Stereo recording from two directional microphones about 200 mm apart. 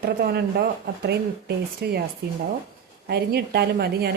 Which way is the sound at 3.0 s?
55° right (ahead or behind).